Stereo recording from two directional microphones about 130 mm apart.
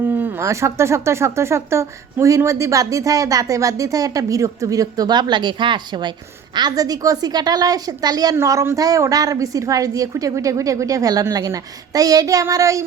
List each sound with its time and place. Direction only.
0.0 s speech: 15° right (ahead or behind)